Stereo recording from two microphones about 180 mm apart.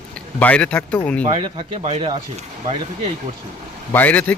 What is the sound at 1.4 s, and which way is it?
Speech, 30° right (ahead or behind).